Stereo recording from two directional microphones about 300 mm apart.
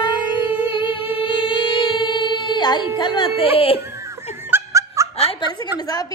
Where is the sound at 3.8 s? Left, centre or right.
Centre.